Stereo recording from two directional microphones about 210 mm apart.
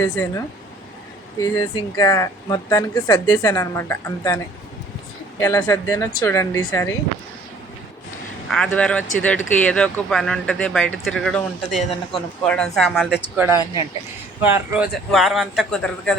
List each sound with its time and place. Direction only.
0.0 s speech: 15° left (ahead or behind)
5.4 s speech: 15° left (ahead or behind)
8.4 s speech: centre (ahead or behind)